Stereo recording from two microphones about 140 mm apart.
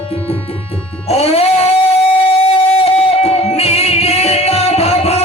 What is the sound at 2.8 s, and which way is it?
Music, 45° left (ahead or behind).